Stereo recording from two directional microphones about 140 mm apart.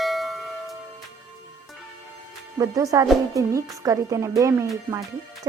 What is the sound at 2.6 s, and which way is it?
Speech, 25° right (ahead or behind).